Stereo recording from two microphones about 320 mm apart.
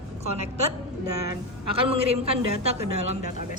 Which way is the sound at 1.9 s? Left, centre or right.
Centre.